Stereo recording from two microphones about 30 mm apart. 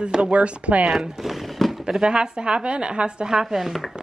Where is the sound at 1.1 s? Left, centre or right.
Centre.